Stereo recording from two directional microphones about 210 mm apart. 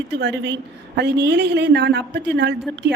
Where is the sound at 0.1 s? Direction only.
55° right (ahead or behind).